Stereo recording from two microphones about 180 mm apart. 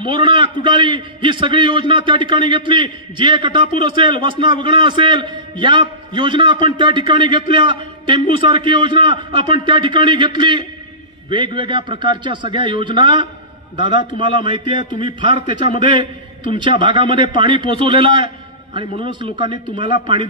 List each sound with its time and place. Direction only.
0.0 s a man's voice: 25° right (ahead or behind)